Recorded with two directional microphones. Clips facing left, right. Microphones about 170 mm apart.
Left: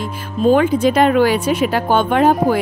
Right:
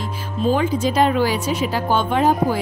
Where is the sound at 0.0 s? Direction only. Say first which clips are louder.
Left 5 dB; 55° left (ahead or behind).